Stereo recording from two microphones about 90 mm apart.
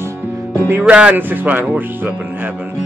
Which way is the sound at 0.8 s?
15° right (ahead or behind).